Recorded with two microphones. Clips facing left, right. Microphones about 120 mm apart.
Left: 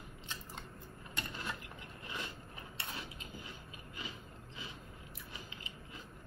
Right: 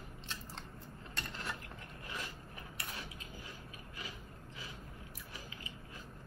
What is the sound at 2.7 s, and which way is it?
Mechanisms, 25° left (ahead or behind).